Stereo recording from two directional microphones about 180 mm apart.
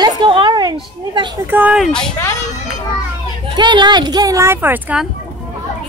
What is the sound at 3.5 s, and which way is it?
Speech, 25° right (ahead or behind).